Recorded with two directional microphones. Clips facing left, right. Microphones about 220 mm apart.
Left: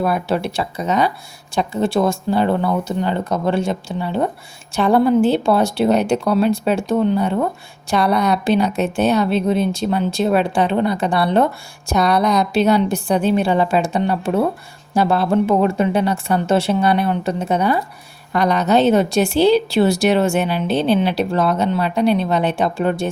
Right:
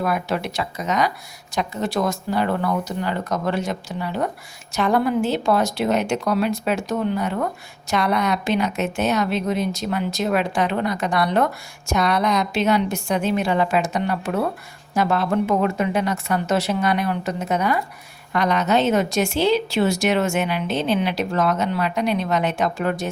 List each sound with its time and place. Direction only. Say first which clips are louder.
0.0 s a woman's voice: left 4 dB; 30° left (ahead or behind)